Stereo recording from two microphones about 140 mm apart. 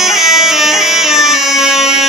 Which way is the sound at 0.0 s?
Centre (ahead or behind).